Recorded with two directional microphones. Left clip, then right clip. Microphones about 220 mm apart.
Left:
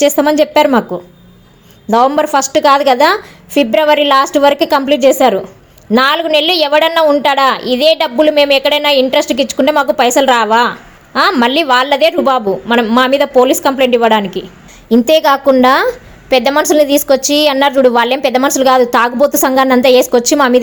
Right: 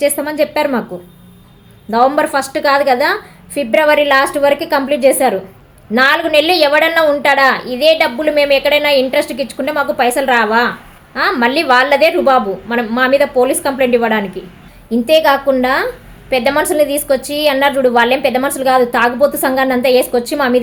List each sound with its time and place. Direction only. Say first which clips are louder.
0.0 s a woman's voice: left 5 dB; 40° left (ahead or behind)
1.9 s a woman's voice: left 2 dB; 40° left (ahead or behind)